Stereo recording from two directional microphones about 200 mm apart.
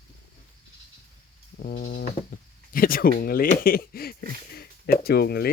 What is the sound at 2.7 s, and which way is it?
Speech, 45° left (ahead or behind).